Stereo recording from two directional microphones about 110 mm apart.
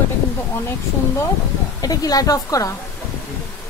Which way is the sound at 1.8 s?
35° left (ahead or behind).